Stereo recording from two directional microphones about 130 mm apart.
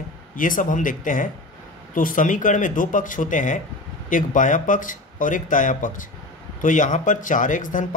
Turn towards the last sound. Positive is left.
turn(degrees=85)